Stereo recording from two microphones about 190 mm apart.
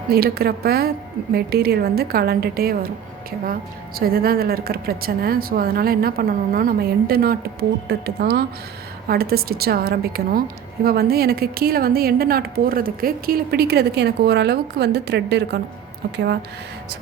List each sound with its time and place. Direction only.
0.1 s a woman's voice: 55° right (ahead or behind)